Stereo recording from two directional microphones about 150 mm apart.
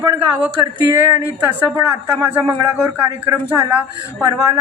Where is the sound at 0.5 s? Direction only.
20° right (ahead or behind).